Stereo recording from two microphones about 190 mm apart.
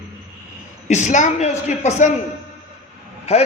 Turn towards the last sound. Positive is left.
turn(degrees=35)  # may be behind; listen again after turning